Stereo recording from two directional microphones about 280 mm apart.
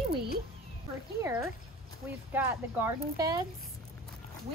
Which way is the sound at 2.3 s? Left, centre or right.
Centre.